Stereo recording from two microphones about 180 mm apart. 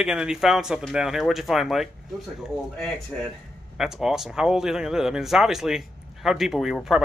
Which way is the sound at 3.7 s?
Centre (ahead or behind).